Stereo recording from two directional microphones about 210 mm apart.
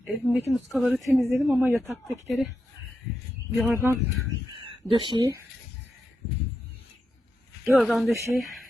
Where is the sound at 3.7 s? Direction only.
10° right (ahead or behind).